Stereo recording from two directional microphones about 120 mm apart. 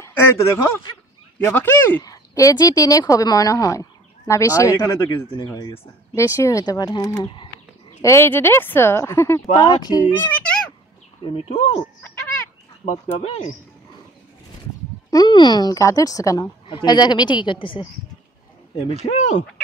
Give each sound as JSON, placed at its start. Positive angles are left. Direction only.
{"t": 0.0, "sound": "a sound", "side_deg": 20}
{"t": 1.4, "sound": "speech", "side_deg": 15}
{"t": 2.0, "sound": "speech", "side_deg": 30}
{"t": 8.0, "sound": "speech", "side_deg": 20}
{"t": 9.6, "sound": "speech", "side_deg": 35}
{"t": 10.2, "sound": "a child's voice", "side_deg": 10}
{"t": 11.3, "sound": "speech", "side_deg": 50}
{"t": 12.8, "sound": "speech", "side_deg": 75}
{"t": 15.0, "sound": "speech", "side_deg": 35}
{"t": 19.0, "sound": "speech", "side_deg": 65}